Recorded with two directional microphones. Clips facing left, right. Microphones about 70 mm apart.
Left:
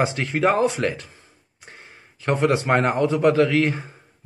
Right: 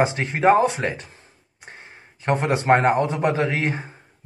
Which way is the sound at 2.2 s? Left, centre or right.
Right.